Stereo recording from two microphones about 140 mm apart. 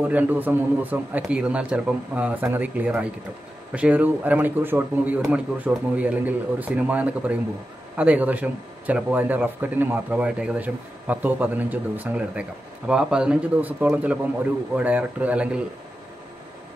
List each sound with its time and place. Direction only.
0.0 s speech: 15° right (ahead or behind)